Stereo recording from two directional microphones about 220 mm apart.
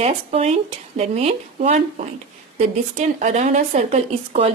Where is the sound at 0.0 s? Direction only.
30° right (ahead or behind).